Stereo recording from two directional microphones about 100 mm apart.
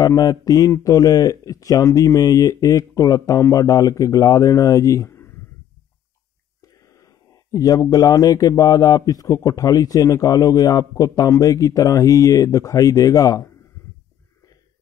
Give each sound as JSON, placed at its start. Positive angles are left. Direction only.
{"t": 0.0, "sound": "speech", "side_deg": 40}
{"t": 6.6, "sound": "speech", "side_deg": 35}